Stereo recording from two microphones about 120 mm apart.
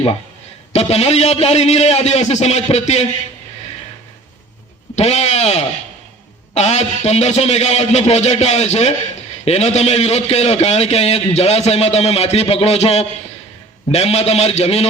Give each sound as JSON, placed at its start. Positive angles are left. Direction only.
{"t": 0.7, "sound": "a man's voice", "side_deg": 60}
{"t": 4.9, "sound": "a man's voice", "side_deg": 65}